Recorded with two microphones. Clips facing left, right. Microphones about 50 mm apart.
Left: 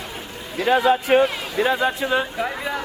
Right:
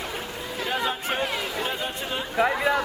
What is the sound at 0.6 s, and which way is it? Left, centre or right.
A man's voice, left.